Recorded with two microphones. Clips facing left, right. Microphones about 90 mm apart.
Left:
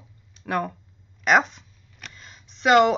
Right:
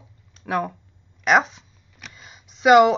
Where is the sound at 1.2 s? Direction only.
Centre (ahead or behind).